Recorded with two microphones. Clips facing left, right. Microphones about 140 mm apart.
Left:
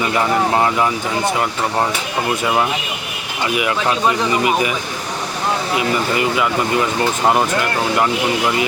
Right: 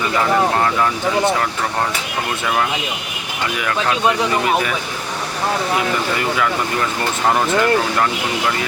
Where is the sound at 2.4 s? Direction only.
20° left (ahead or behind).